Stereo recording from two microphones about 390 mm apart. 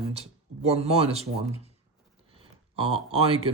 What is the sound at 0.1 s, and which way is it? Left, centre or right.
Speech, centre.